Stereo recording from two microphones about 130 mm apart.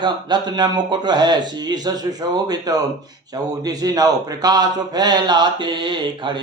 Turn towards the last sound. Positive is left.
turn(degrees=-40)  # may be behind; listen again after turning